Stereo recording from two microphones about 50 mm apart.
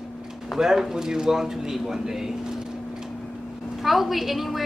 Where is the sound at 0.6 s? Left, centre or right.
Centre.